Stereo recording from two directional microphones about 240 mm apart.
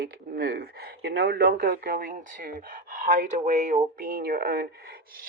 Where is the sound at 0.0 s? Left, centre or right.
Right.